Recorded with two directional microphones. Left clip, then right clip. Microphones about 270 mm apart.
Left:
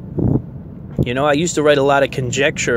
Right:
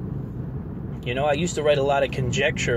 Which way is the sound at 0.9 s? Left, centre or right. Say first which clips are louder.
Left 7 dB; left.